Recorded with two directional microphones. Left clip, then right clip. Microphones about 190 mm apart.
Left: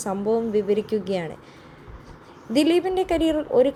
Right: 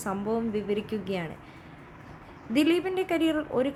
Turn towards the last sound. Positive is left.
turn(degrees=15)  # may be behind; listen again after turning